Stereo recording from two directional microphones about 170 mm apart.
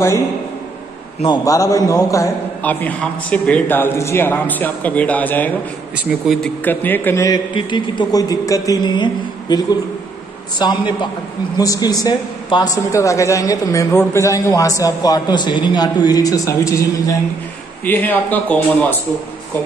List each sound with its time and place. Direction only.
1.2 s a man's voice: 25° left (ahead or behind)
5.9 s speech: 5° right (ahead or behind)
6.6 s a man's voice: 10° left (ahead or behind)